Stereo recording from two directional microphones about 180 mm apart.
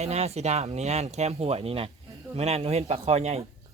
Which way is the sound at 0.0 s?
35° right (ahead or behind).